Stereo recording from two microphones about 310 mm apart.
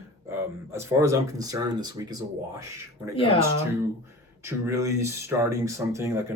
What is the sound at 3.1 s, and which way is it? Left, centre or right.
Speech, centre.